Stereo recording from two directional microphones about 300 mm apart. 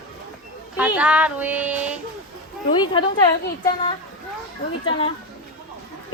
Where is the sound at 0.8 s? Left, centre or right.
Centre.